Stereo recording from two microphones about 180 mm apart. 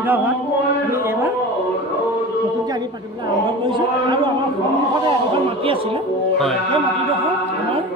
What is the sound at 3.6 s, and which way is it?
Chant, 25° right (ahead or behind).